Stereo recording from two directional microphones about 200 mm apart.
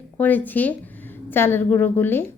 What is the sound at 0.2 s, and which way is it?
A woman's voice, 10° left (ahead or behind).